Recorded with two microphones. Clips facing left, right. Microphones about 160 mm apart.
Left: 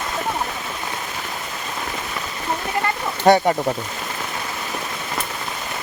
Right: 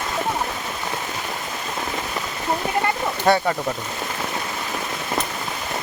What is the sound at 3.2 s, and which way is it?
Speech, 20° left (ahead or behind).